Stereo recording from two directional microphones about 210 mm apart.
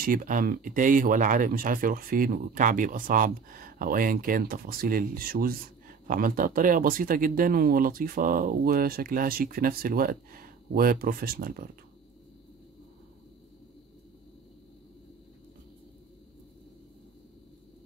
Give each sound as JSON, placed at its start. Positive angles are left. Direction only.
{"t": 0.0, "sound": "speech", "side_deg": -40}